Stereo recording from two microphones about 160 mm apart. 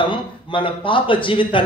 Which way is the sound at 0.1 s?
30° left (ahead or behind).